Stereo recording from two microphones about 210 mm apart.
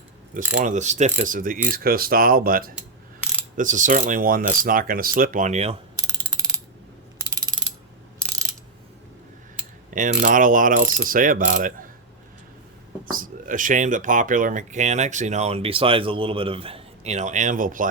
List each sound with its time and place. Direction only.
0.3 s speech: 35° right (ahead or behind)
1.6 s cutlery: 45° right (ahead or behind)
3.6 s speech: 35° right (ahead or behind)
9.9 s speech: 40° right (ahead or behind)
13.1 s speech: 40° right (ahead or behind)